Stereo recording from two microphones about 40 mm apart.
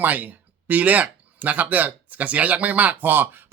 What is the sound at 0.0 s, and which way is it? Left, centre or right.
Speech, right.